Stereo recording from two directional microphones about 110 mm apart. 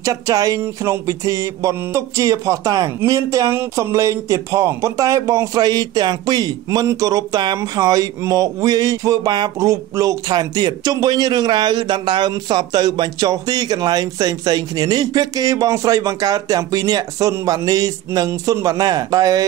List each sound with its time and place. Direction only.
0.0 s music: 30° right (ahead or behind)
5.6 s speech: 40° right (ahead or behind)